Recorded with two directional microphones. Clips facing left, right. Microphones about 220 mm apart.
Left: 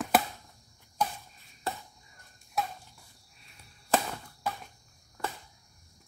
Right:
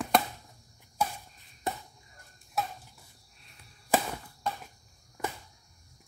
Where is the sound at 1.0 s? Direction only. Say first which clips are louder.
Even; 10° right (ahead or behind).